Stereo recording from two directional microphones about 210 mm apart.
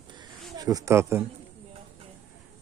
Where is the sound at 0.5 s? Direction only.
15° right (ahead or behind).